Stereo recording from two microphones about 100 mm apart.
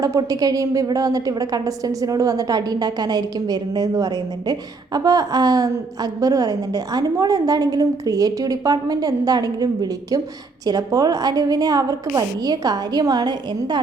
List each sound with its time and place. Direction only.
0.0 s a woman's voice: 35° right (ahead or behind)